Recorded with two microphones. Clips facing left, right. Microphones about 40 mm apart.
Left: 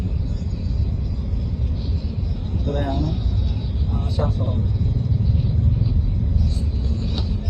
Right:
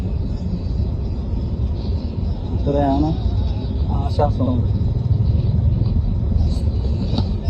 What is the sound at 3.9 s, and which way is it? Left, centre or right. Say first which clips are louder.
Vehicle: right 6 dB; right.